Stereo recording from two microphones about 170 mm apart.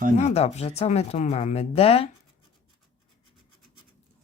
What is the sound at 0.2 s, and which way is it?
Speech, 40° left (ahead or behind).